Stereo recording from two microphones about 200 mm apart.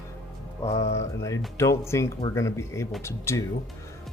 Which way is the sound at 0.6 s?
35° left (ahead or behind).